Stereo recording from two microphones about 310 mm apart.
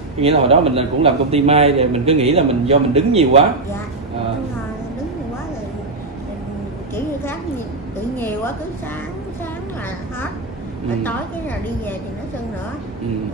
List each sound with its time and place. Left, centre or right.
0.2 s a man's voice: centre
11.1 s a woman's voice: centre